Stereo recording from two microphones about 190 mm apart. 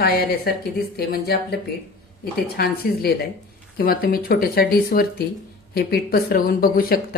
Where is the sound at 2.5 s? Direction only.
50° left (ahead or behind).